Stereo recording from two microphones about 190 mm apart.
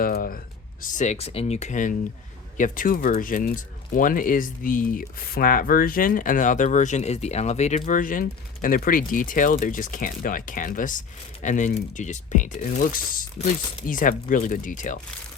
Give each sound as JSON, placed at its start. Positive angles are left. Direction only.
{"t": 0.0, "sound": "speech", "side_deg": 50}